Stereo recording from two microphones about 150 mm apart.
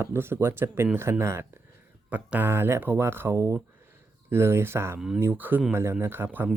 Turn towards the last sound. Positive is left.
turn(degrees=-15)  # may be behind; listen again after turning